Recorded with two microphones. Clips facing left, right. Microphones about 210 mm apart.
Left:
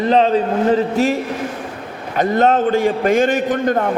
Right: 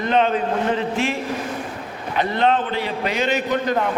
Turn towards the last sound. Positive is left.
turn(degrees=50)  # may be behind; listen again after turning